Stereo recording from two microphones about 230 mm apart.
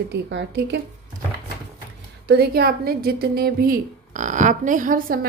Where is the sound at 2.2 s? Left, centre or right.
Right.